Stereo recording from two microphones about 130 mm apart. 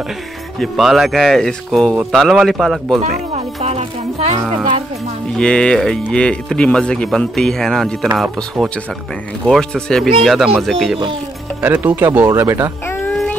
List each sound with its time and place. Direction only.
0.6 s speech: centre (ahead or behind)
3.0 s speech: 55° right (ahead or behind)
5.4 s speech: 5° left (ahead or behind)
11.6 s speech: 15° right (ahead or behind)
12.8 s a sound: 20° left (ahead or behind)